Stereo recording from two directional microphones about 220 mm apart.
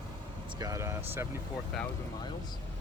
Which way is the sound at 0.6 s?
15° right (ahead or behind).